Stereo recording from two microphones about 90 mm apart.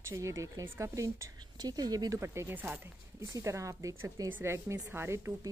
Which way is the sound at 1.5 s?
45° right (ahead or behind).